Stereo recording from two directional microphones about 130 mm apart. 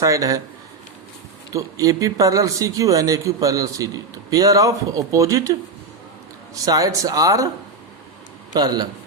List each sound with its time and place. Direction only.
0.0 s speech: 25° right (ahead or behind)
1.8 s speech: 25° right (ahead or behind)
8.5 s a man's voice: 30° right (ahead or behind)